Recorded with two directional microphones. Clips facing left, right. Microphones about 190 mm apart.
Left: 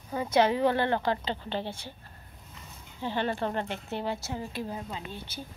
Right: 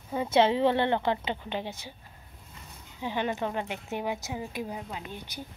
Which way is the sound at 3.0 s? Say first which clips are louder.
Even; 15° right (ahead or behind).